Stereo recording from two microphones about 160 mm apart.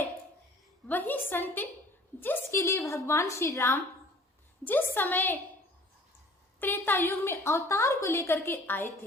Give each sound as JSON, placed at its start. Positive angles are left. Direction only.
{"t": 0.9, "sound": "a sound", "side_deg": 10}
{"t": 2.2, "sound": "a woman's voice", "side_deg": 15}
{"t": 6.6, "sound": "a woman's voice", "side_deg": 10}